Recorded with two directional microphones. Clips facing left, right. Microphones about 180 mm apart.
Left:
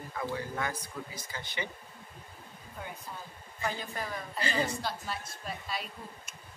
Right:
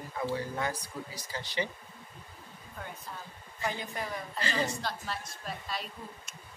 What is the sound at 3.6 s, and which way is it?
Speech, 20° right (ahead or behind).